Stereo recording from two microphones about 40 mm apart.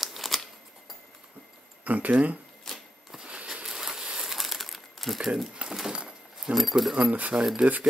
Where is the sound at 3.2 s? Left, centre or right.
Right.